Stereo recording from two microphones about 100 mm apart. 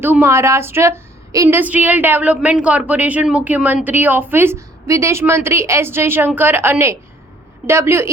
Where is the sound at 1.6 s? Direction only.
15° right (ahead or behind).